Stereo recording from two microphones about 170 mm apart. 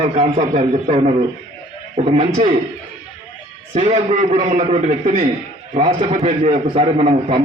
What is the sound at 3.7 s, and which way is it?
A man's voice, 40° right (ahead or behind).